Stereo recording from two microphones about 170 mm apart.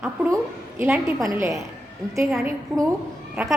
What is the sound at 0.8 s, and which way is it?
Speech, 10° right (ahead or behind).